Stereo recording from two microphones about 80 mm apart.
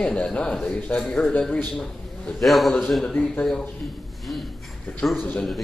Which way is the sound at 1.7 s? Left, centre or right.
Centre.